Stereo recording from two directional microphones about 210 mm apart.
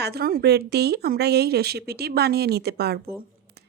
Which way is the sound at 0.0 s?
50° right (ahead or behind).